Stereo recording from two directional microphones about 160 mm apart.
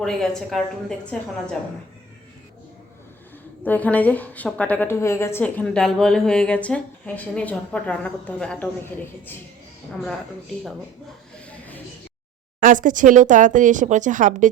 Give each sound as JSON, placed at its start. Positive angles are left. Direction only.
{"t": 0.0, "sound": "a woman's voice", "side_deg": 5}
{"t": 3.6, "sound": "a woman's voice", "side_deg": 10}
{"t": 12.5, "sound": "speech", "side_deg": -55}